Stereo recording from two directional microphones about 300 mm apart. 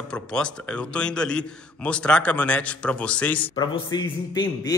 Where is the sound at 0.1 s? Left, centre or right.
Centre.